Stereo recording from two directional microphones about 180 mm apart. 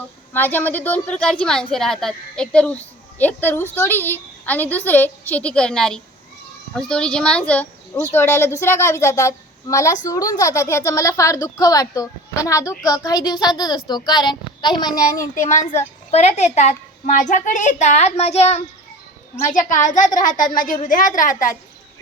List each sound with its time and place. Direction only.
0.3 s a woman's voice: 10° left (ahead or behind)
15.4 s a woman's voice: 45° left (ahead or behind)
19.8 s speech: 45° left (ahead or behind)